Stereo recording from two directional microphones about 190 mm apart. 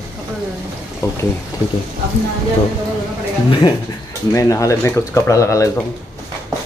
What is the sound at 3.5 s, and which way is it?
Speech, 25° left (ahead or behind).